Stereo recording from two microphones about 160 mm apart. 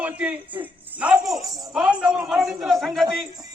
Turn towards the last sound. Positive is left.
turn(degrees=0)  # may be behind; listen again after turning